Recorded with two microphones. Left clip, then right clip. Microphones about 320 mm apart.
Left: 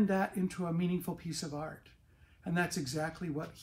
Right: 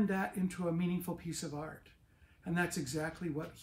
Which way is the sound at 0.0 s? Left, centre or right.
Centre.